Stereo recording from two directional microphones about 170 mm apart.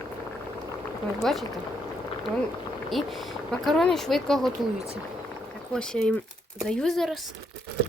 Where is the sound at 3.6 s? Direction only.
Centre (ahead or behind).